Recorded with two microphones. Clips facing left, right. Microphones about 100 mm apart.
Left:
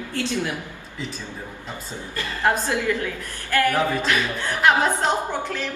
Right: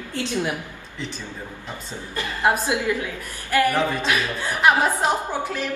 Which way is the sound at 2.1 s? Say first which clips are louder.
Right 1 dB; 15° right (ahead or behind).